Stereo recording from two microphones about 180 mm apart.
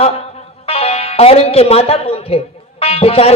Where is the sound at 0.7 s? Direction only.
35° left (ahead or behind).